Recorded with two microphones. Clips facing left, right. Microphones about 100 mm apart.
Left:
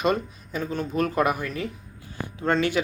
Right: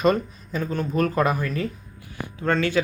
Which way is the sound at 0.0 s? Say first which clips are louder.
Right 3 dB; 10° left (ahead or behind).